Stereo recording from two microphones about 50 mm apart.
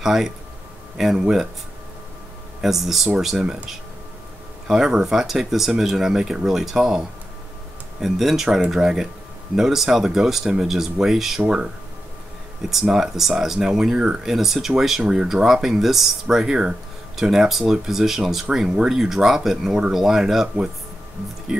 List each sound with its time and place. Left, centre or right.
0.0 s speech: centre
2.6 s speech: centre
4.6 s speech: centre
12.8 s speech: centre